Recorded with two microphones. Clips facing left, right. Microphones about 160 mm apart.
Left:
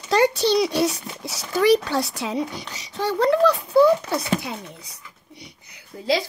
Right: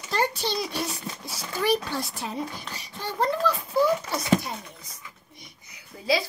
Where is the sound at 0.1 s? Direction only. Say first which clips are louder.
Left 9 dB; 85° left.